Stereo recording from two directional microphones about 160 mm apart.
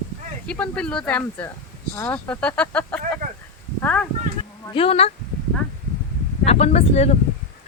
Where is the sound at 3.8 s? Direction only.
10° left (ahead or behind).